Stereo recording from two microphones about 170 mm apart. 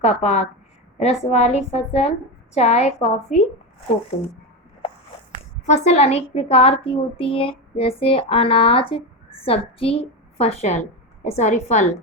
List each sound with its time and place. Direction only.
0.0 s speech: 40° left (ahead or behind)
5.6 s speech: 40° left (ahead or behind)